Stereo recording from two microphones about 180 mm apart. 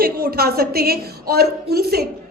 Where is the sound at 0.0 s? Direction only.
55° right (ahead or behind).